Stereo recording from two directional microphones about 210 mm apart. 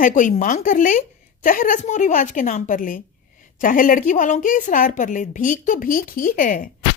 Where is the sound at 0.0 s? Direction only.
35° left (ahead or behind).